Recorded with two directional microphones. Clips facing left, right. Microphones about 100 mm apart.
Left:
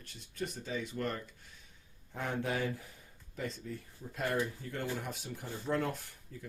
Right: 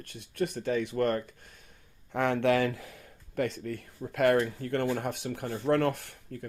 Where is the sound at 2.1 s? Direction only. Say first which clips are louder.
Right 10 dB; 75° right (ahead or behind).